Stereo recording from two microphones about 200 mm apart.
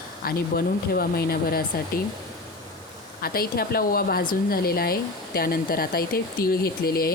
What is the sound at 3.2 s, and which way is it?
Speech, 50° left (ahead or behind).